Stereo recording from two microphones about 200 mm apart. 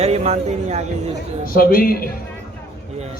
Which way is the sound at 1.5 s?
45° left (ahead or behind).